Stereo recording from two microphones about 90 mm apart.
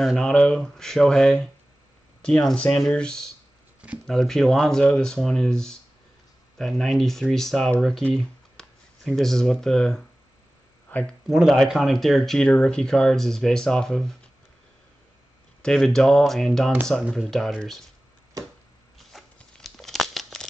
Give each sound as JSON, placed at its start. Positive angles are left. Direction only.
{"t": 0.2, "sound": "speech", "side_deg": 10}
{"t": 10.9, "sound": "speech", "side_deg": 20}
{"t": 11.2, "sound": "speech", "side_deg": -5}
{"t": 15.6, "sound": "speech", "side_deg": 5}
{"t": 19.1, "sound": "a sound", "side_deg": 0}
{"t": 19.6, "sound": "crumpling", "side_deg": 0}